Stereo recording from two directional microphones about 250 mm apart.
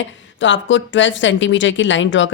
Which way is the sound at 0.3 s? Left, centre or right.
Left.